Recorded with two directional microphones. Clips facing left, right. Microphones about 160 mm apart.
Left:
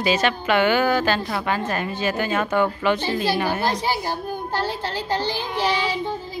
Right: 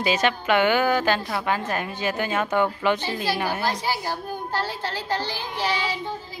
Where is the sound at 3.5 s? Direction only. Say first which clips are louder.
Left 3 dB; 20° left (ahead or behind).